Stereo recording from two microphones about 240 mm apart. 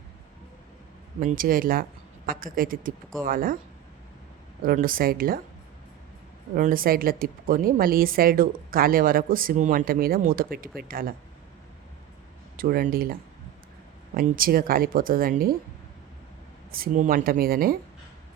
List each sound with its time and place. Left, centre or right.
1.2 s speech: right
4.6 s speech: right
6.5 s speech: right
12.5 s speech: right
14.2 s speech: right
16.7 s speech: right